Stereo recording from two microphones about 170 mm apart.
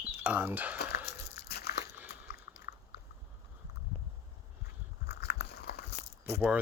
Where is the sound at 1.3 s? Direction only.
70° left (ahead or behind).